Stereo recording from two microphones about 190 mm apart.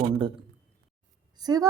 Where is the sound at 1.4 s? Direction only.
20° right (ahead or behind).